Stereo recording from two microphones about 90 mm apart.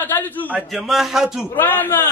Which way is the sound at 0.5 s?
5° right (ahead or behind).